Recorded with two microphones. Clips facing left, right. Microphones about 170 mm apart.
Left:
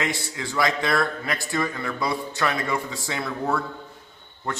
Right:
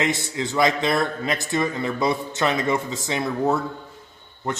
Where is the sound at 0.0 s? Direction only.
20° right (ahead or behind).